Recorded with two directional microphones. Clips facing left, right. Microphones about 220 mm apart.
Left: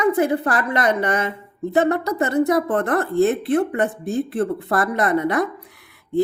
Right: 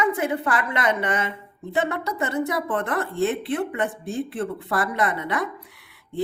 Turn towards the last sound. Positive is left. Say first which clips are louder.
# left 10 dB
turn(degrees=45)  # may be behind; listen again after turning